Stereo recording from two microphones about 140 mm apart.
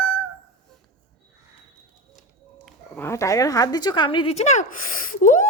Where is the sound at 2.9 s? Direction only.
20° left (ahead or behind); by 5.4 s 70° left (ahead or behind).